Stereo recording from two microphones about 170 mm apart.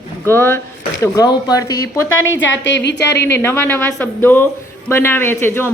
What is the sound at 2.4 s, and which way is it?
Speech, 90° left.